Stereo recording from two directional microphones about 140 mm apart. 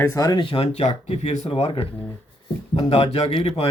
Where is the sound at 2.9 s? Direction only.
50° left (ahead or behind).